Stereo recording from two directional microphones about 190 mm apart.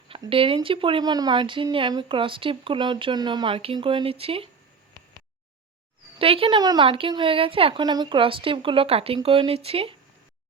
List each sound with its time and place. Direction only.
0.1 s speech: 30° right (ahead or behind)
6.1 s speech: 30° right (ahead or behind)